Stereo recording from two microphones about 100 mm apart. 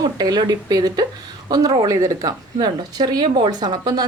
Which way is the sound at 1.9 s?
35° right (ahead or behind).